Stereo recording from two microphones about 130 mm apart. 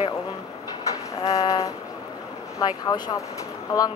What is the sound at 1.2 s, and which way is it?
Train, 25° left (ahead or behind).